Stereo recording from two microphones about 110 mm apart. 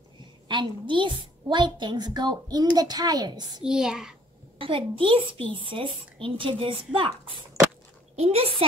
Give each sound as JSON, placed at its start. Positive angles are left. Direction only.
{"t": 0.5, "sound": "a woman's voice", "side_deg": -45}
{"t": 3.6, "sound": "a child's voice", "side_deg": -5}
{"t": 4.6, "sound": "a woman's voice", "side_deg": -55}
{"t": 8.2, "sound": "a child's voice", "side_deg": -65}